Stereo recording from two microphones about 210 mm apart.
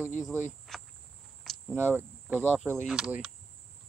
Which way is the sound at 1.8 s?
10° right (ahead or behind).